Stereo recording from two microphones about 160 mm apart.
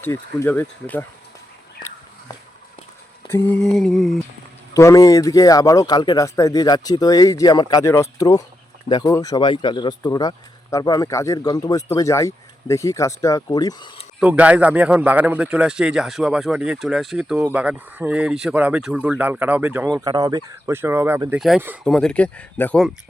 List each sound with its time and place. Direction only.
0.0 s speech: 15° left (ahead or behind)
3.2 s a man's voice: 15° left (ahead or behind)
4.7 s speech: 20° left (ahead or behind)
14.2 s a man's voice: 10° right (ahead or behind)
19.9 s speech: 25° right (ahead or behind)
21.2 s a man's voice: 5° right (ahead or behind)